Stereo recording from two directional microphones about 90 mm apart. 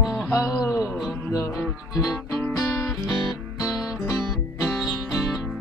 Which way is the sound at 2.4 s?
30° left (ahead or behind).